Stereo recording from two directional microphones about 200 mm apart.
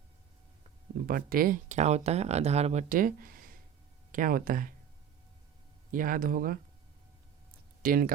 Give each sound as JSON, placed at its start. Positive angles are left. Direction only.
{"t": 1.0, "sound": "speech", "side_deg": -45}
{"t": 5.9, "sound": "speech", "side_deg": -45}
{"t": 7.8, "sound": "speech", "side_deg": -45}